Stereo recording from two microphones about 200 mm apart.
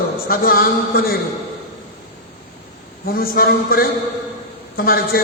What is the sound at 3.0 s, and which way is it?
A man's voice, 50° left (ahead or behind).